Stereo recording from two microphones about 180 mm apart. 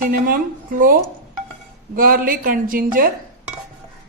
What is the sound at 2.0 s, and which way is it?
A woman's voice, 50° right (ahead or behind).